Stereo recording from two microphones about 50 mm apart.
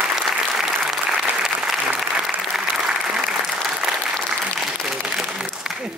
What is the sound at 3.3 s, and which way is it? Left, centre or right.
Applause, centre.